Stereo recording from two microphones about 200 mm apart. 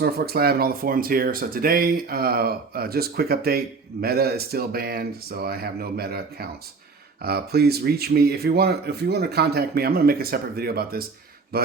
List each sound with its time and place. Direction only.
0.0 s speech: 50° right (ahead or behind)